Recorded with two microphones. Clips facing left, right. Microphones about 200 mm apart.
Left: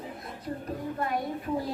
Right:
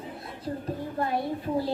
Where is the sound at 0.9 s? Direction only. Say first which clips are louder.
Right 3 dB; 30° right (ahead or behind).